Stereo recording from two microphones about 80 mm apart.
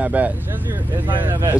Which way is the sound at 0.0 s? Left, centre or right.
Centre.